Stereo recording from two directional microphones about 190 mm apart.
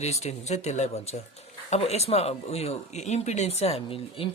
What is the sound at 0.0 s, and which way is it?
Speech, 35° left (ahead or behind).